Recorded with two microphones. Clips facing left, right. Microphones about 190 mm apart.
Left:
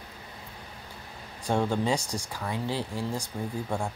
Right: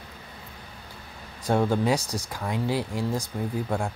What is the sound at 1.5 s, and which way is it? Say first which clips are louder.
Speech: right 3 dB; 5° right (ahead or behind).